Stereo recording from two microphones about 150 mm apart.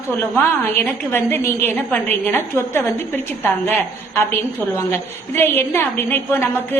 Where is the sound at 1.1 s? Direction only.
15° left (ahead or behind).